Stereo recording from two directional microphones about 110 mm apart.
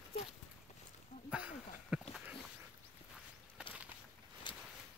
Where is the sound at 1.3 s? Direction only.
10° right (ahead or behind).